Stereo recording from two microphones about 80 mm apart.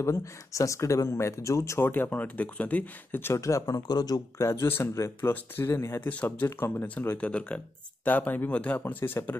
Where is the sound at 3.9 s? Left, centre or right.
Left.